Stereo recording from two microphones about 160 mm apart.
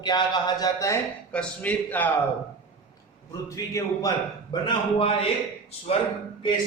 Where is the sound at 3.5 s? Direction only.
20° left (ahead or behind).